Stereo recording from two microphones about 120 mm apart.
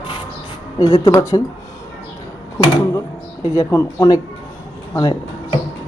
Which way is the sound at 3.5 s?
25° left (ahead or behind).